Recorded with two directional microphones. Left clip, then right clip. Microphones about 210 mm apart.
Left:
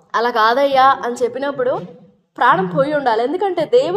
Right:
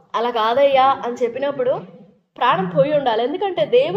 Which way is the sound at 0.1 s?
25° left (ahead or behind).